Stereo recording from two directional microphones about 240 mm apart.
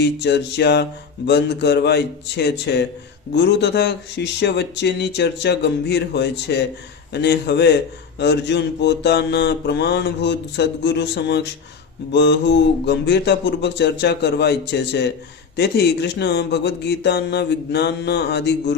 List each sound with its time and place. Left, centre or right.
0.0 s speech: left